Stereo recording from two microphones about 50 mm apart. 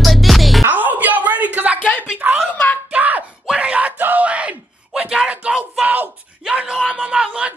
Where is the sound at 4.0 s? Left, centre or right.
Right.